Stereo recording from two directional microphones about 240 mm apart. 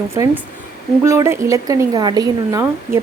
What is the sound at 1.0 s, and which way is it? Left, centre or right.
Speech, centre.